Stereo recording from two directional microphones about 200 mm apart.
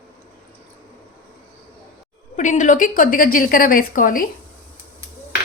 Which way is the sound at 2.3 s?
40° left (ahead or behind).